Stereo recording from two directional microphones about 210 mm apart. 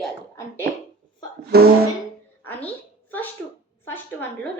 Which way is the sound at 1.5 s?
50° right (ahead or behind).